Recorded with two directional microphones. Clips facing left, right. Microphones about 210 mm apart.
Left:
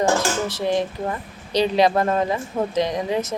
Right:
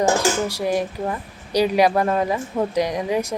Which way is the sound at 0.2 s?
10° right (ahead or behind).